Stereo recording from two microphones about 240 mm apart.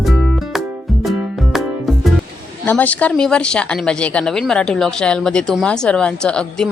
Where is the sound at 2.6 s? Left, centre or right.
Centre.